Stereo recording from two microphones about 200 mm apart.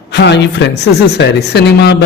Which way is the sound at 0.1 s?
60° left (ahead or behind).